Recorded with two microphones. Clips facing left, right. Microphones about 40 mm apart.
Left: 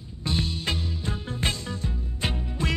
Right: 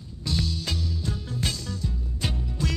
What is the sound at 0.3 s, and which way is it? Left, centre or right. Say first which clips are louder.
Music: left 1 dB; left.